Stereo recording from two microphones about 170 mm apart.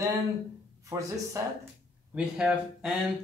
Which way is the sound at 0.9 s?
20° right (ahead or behind).